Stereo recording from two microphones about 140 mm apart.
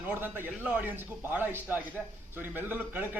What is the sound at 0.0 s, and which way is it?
A man's voice, 10° right (ahead or behind).